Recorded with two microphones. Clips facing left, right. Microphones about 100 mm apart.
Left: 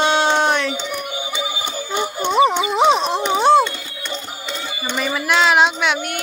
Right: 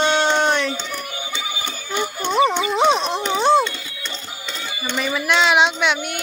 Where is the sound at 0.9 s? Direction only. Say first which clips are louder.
Left 3 dB; 20° left (ahead or behind).